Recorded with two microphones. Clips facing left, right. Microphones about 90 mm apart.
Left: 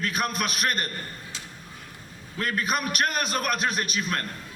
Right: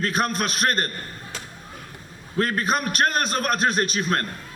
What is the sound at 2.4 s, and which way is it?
A man's voice, 35° right (ahead or behind).